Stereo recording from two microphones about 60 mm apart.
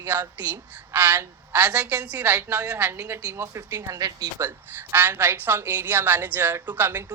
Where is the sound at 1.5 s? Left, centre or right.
Right.